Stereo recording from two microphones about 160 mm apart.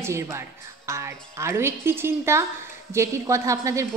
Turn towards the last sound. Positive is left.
turn(degrees=-20)  # may be behind; listen again after turning